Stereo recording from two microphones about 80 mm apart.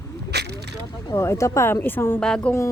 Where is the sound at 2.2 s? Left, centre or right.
Centre.